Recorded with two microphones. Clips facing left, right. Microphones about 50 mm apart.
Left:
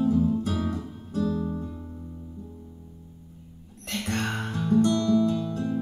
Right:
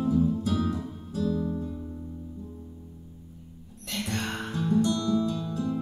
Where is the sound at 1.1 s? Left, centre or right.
Left.